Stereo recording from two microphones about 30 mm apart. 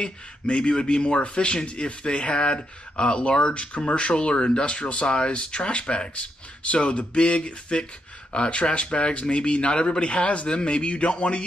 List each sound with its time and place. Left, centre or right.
0.0 s a man's voice: left